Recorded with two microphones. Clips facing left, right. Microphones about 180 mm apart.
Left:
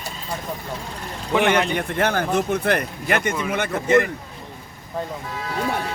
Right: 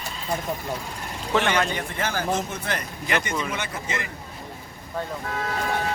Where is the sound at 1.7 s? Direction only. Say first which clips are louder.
Left 6 dB; 60° left (ahead or behind).